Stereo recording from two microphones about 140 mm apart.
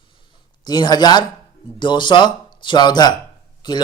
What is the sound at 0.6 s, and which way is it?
Speech, 30° left (ahead or behind).